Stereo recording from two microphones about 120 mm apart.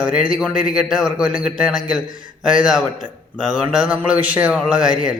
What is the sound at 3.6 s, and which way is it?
Speech, 10° right (ahead or behind).